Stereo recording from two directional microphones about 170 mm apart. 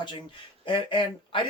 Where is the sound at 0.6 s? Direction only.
30° left (ahead or behind).